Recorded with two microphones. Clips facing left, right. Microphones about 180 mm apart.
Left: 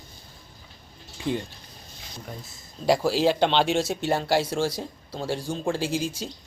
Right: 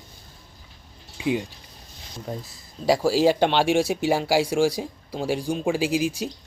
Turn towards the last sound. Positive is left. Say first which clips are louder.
# right 4 dB
turn(degrees=-10)  # may be behind; listen again after turning